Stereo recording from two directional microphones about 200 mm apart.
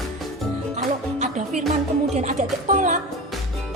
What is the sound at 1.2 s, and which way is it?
Music, 35° right (ahead or behind).